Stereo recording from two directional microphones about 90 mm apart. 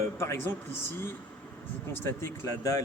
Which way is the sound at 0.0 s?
30° left (ahead or behind).